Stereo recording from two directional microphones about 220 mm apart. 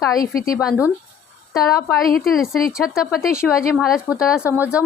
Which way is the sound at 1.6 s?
15° left (ahead or behind).